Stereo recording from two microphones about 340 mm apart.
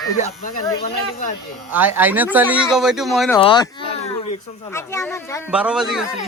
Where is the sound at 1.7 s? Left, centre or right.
Centre.